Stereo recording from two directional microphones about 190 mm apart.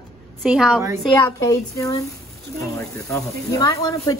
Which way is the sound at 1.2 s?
15° left (ahead or behind).